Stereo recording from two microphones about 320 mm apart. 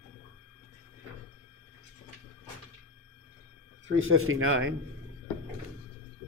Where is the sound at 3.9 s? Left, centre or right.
Right.